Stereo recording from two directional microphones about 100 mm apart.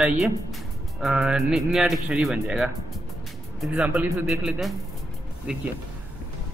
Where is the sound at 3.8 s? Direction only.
15° right (ahead or behind).